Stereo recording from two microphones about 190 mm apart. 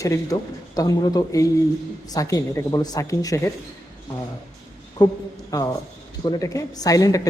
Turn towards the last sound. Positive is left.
turn(degrees=20)  # may be behind; listen again after turning